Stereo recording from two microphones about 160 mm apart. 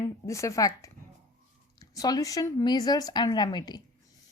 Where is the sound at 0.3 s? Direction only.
20° left (ahead or behind).